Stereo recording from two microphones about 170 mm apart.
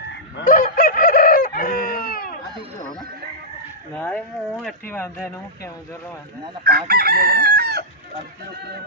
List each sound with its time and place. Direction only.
0.4 s chicken: 55° left (ahead or behind)
3.9 s speech: 10° left (ahead or behind)
6.7 s chicken: 65° right (ahead or behind)